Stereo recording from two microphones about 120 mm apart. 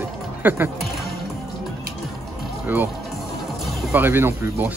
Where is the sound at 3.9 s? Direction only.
20° right (ahead or behind).